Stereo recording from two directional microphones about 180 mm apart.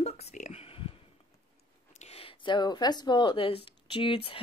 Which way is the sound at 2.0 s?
30° left (ahead or behind).